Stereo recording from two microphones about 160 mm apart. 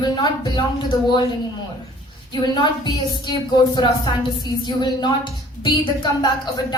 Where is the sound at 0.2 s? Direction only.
30° left (ahead or behind).